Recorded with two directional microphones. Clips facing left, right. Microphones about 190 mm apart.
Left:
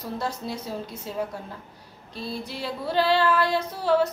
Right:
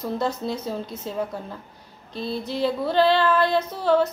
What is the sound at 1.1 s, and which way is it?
Speech, 5° left (ahead or behind).